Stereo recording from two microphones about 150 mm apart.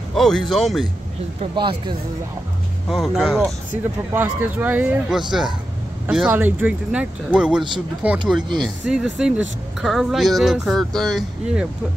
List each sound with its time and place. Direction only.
0.1 s speech: centre (ahead or behind)
1.5 s speech: 30° right (ahead or behind)
2.9 s speech: centre (ahead or behind)
4.1 s speech: 10° right (ahead or behind)